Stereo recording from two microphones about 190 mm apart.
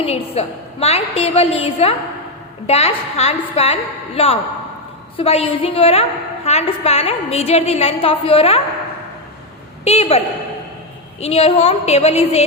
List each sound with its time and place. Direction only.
0.0 s a woman's voice: 30° left (ahead or behind)
9.8 s a woman's voice: 35° left (ahead or behind)